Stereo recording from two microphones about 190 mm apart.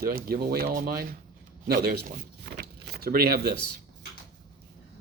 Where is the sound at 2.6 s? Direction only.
55° right (ahead or behind).